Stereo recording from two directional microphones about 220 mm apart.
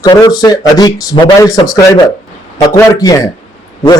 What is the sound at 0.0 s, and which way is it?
A man's voice, 20° left (ahead or behind).